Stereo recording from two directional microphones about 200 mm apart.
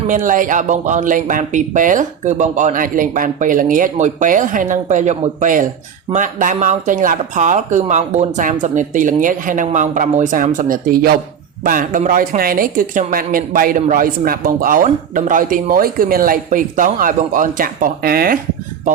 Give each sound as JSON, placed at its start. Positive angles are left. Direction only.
{"t": 0.1, "sound": "a woman's voice", "side_deg": -40}